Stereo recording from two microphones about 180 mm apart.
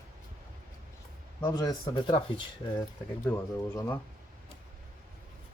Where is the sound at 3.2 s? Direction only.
15° left (ahead or behind).